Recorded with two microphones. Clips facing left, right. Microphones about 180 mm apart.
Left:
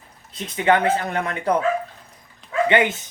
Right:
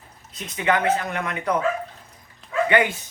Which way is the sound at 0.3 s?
30° left (ahead or behind).